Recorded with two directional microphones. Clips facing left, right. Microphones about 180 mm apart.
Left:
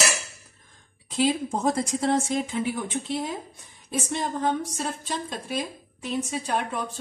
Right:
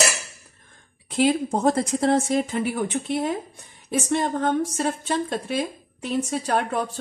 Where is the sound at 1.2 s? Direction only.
60° right (ahead or behind).